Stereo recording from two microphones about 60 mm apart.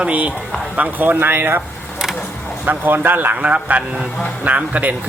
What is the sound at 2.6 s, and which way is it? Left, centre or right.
Speech, right.